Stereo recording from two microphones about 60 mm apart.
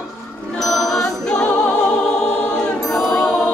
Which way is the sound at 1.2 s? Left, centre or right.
Centre.